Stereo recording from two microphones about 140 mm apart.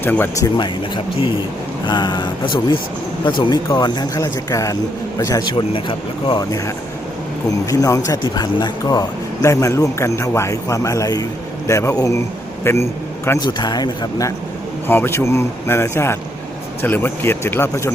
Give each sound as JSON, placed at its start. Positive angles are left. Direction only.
{"t": 0.0, "sound": "a man's voice", "side_deg": 15}
{"t": 0.5, "sound": "a man's voice", "side_deg": 35}
{"t": 7.4, "sound": "a man's voice", "side_deg": 25}
{"t": 13.4, "sound": "speech", "side_deg": 30}
{"t": 14.8, "sound": "a man's voice", "side_deg": 15}